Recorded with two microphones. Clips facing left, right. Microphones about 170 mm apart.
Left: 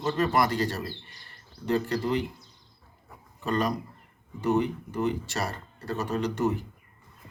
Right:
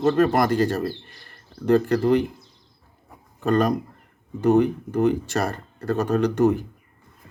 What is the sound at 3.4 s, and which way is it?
Speech, 50° right (ahead or behind).